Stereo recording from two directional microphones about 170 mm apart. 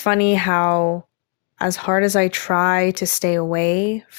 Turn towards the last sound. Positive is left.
turn(degrees=45)  # may be behind; listen again after turning